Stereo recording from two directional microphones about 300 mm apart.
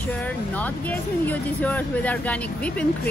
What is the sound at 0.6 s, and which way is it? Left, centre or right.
Speech, centre.